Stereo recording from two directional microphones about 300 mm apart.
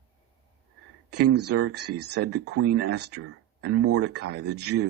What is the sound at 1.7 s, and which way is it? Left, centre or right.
Speech, right.